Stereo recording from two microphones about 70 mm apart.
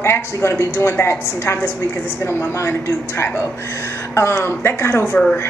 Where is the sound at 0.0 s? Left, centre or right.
Left.